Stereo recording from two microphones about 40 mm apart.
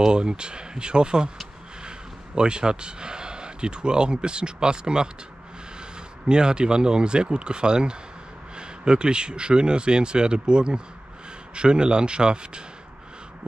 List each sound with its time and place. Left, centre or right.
0.0 s speech: right
6.2 s speech: right